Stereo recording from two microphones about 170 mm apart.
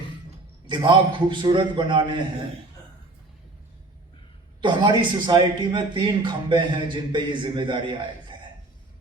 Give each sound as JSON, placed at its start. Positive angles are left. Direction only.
{"t": 0.7, "sound": "a man's voice", "side_deg": -25}
{"t": 4.6, "sound": "a man's voice", "side_deg": -25}